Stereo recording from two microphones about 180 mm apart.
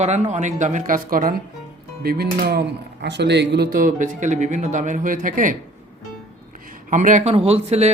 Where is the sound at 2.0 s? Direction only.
60° right (ahead or behind).